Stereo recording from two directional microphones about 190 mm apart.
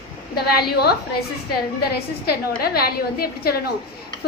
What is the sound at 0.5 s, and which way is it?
Speech, 55° left (ahead or behind).